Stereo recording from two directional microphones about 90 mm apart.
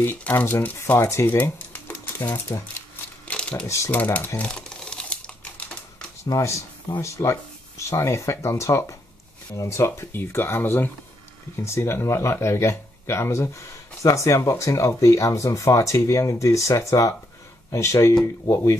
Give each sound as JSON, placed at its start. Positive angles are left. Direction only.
{"t": 0.0, "sound": "speech", "side_deg": 25}
{"t": 3.3, "sound": "typewriter", "side_deg": 10}
{"t": 3.6, "sound": "speech", "side_deg": 30}
{"t": 3.9, "sound": "speech", "side_deg": 20}
{"t": 4.4, "sound": "crumpling", "side_deg": 10}
{"t": 6.2, "sound": "speech", "side_deg": 40}